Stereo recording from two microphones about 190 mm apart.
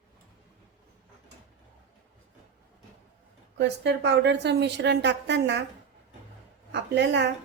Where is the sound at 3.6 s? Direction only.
65° right (ahead or behind).